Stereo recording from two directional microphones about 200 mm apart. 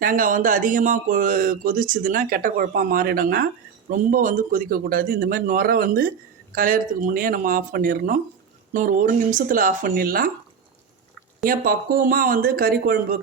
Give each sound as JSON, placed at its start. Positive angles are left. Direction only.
{"t": 0.0, "sound": "speech", "side_deg": -45}
{"t": 11.4, "sound": "speech", "side_deg": -45}